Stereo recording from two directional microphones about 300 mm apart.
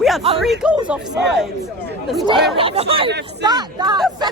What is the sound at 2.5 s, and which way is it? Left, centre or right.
A woman's voice, centre.